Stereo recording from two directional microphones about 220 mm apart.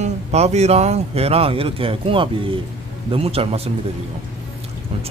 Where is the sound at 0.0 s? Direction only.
30° right (ahead or behind).